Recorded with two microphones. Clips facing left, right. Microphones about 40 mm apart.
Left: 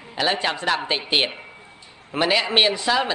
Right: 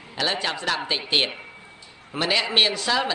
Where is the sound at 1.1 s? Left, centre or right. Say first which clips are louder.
Even; centre.